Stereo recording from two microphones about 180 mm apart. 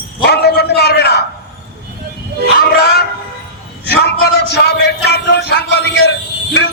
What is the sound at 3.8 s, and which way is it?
Music, 65° left (ahead or behind).